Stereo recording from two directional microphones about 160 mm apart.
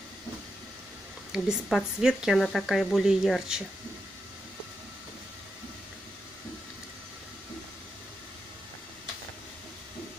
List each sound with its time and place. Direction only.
1.3 s speech: 5° right (ahead or behind)